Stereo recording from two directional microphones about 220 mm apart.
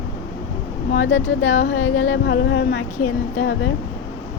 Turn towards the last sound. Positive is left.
turn(degrees=55)  # may be behind; listen again after turning